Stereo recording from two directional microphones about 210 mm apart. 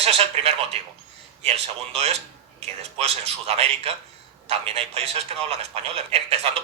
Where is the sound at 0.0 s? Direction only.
30° right (ahead or behind).